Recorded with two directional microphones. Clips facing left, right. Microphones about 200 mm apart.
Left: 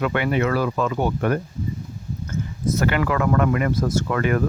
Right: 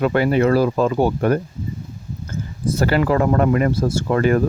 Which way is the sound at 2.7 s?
35° right (ahead or behind).